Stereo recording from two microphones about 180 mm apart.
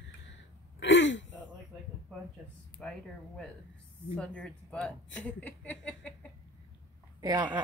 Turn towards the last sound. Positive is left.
turn(degrees=-25)  # may be behind; listen again after turning